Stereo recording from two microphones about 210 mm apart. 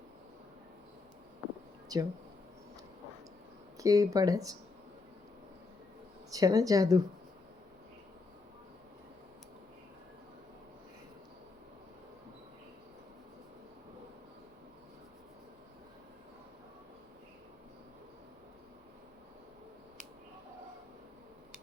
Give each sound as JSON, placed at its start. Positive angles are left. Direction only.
{"t": 1.9, "sound": "speech", "side_deg": -15}
{"t": 3.8, "sound": "speech", "side_deg": -15}
{"t": 6.3, "sound": "speech", "side_deg": -15}